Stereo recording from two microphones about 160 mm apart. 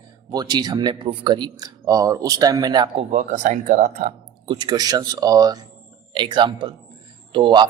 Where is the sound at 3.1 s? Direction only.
50° right (ahead or behind).